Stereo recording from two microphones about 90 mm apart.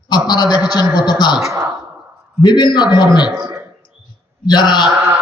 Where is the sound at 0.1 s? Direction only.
50° left (ahead or behind).